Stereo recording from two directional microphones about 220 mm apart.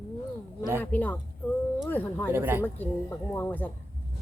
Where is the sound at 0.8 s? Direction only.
10° left (ahead or behind).